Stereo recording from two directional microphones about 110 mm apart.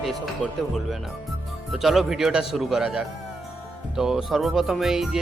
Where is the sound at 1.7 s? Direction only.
Centre (ahead or behind).